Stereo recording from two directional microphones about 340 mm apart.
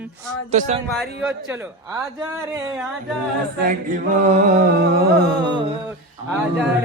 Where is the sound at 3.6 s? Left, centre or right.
Right.